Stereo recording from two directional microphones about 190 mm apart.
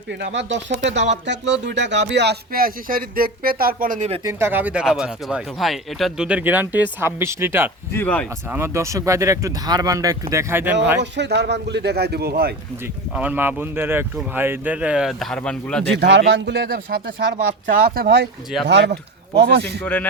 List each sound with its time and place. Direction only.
0.1 s speech: 70° right (ahead or behind); by 4.2 s 40° right (ahead or behind)
4.2 s speech: 15° right (ahead or behind)
7.9 s speech: 10° left (ahead or behind)
8.4 s speech: 15° right (ahead or behind)
11.0 s speech: 65° right (ahead or behind)
13.1 s speech: 10° right (ahead or behind)
16.0 s speech: 65° right (ahead or behind)
19.8 s speech: 10° left (ahead or behind)